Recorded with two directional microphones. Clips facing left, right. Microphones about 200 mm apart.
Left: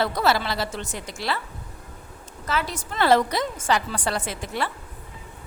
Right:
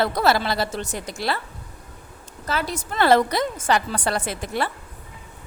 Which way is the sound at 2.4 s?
40° right (ahead or behind).